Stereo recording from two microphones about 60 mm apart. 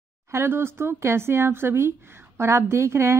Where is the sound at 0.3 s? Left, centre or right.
Right.